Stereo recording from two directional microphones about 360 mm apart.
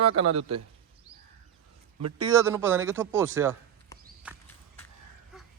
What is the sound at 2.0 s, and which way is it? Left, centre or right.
Speech, right.